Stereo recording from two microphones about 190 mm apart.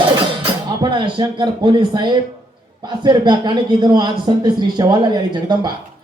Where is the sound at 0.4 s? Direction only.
25° right (ahead or behind).